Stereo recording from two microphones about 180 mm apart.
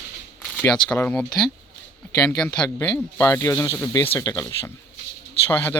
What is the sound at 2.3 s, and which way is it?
Speech, 10° left (ahead or behind).